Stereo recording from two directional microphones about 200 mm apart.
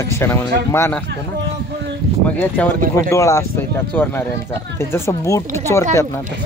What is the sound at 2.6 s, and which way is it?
Speech, 5° left (ahead or behind).